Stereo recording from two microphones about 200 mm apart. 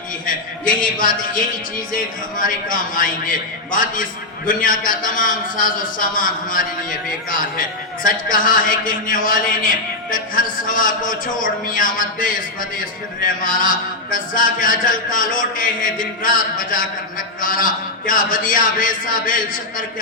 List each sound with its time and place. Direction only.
0.3 s a man's voice: 45° left (ahead or behind)
8.0 s a man's voice: 40° left (ahead or behind)